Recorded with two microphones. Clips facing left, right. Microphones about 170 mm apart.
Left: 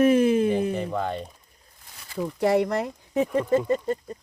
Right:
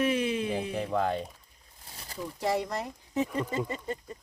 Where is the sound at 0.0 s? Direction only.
45° left (ahead or behind).